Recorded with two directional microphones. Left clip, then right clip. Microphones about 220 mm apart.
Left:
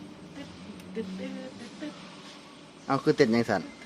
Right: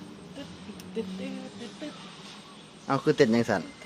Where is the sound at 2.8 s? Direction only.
Centre (ahead or behind).